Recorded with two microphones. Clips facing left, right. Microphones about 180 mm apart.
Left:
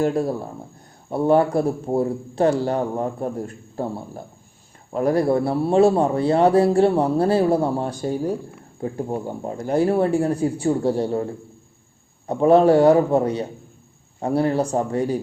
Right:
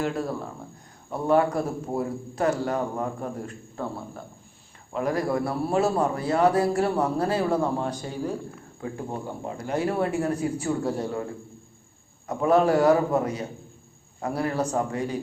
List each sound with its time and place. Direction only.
0.0 s a man's voice: 40° left (ahead or behind)